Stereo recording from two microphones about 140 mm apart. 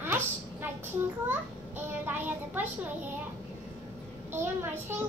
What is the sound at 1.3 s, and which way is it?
A child's voice, 15° right (ahead or behind).